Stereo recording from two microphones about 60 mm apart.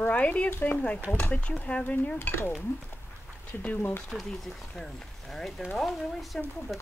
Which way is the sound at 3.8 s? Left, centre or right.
Left.